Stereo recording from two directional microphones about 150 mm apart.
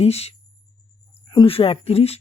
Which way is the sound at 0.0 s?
45° left (ahead or behind).